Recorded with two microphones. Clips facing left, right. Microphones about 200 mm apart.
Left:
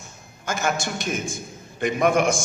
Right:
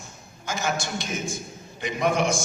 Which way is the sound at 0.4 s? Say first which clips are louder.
Left 3 dB; 50° left (ahead or behind).